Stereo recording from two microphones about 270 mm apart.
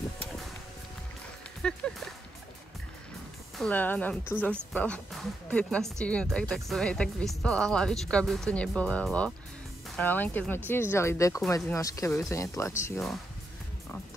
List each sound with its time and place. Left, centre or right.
1.6 s speech: centre
3.5 s speech: centre